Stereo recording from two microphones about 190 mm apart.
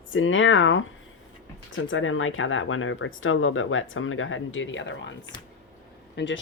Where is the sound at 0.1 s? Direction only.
90° left.